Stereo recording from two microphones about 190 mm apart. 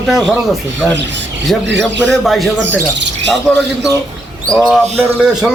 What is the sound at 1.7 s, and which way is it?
Speech, 70° right (ahead or behind).